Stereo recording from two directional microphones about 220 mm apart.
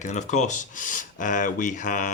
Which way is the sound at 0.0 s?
35° left (ahead or behind).